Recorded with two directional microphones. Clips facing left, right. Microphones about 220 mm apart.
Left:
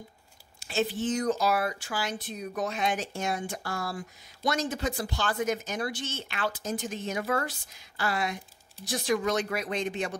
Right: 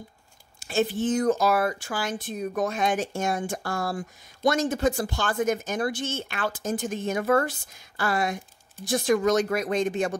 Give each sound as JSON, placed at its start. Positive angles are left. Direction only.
{"t": 0.6, "sound": "speech", "side_deg": -50}